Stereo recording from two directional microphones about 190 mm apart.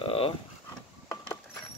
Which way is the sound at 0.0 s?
30° left (ahead or behind).